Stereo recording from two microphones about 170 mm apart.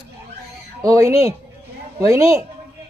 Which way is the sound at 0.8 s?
20° right (ahead or behind).